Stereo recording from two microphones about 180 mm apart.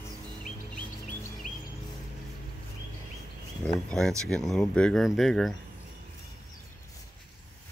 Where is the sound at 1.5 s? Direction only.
45° left (ahead or behind).